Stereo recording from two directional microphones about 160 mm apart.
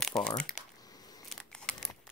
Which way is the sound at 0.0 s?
5° left (ahead or behind).